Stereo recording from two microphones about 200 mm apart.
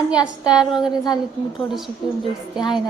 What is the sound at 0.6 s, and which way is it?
Speech, 5° right (ahead or behind).